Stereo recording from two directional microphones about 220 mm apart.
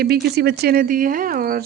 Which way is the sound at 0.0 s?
45° right (ahead or behind).